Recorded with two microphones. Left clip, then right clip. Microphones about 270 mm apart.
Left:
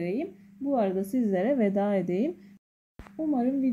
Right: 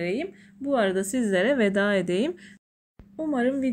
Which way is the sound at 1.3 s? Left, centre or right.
Right.